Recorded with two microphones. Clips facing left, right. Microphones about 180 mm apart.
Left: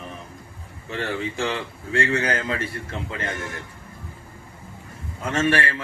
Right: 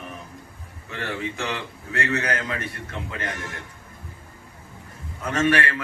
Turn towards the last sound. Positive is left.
turn(degrees=25)  # may be behind; listen again after turning